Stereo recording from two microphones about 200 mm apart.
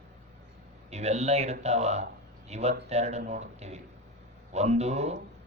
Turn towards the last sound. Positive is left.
turn(degrees=-35)  # may be behind; listen again after turning